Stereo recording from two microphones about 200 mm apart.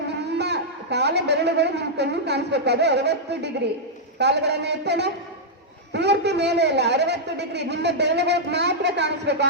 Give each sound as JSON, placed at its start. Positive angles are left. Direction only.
{"t": 0.1, "sound": "a man's voice", "side_deg": -55}